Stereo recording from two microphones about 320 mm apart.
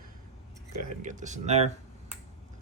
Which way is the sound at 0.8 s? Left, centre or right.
Right.